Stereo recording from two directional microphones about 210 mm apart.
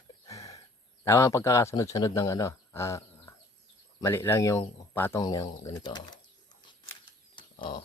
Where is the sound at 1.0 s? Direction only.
15° left (ahead or behind).